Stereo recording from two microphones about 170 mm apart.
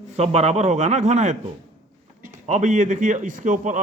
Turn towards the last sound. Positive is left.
turn(degrees=-45)  # may be behind; listen again after turning